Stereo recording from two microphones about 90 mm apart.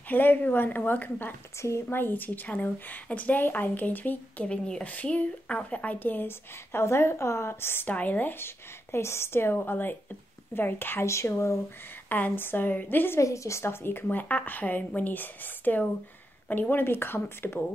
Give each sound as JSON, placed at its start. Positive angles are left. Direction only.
{"t": 0.1, "sound": "a woman's voice", "side_deg": 20}
{"t": 13.2, "sound": "a woman's voice", "side_deg": 35}